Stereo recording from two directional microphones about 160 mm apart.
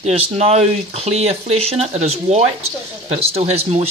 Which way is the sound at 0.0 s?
40° right (ahead or behind).